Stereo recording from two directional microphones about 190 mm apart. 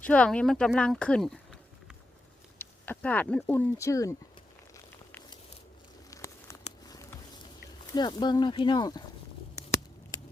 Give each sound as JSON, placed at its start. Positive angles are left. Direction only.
{"t": 0.0, "sound": "speech", "side_deg": 5}
{"t": 2.6, "sound": "speech", "side_deg": 10}
{"t": 6.1, "sound": "a sound", "side_deg": 15}
{"t": 7.9, "sound": "speech", "side_deg": 20}